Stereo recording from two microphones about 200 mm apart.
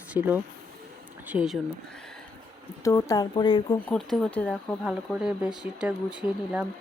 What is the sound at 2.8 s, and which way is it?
Speech, 15° left (ahead or behind).